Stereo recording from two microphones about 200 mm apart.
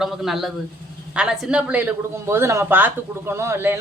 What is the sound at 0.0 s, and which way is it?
Speech, centre (ahead or behind).